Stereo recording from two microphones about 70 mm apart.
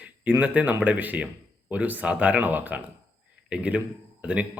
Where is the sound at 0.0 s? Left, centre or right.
Right.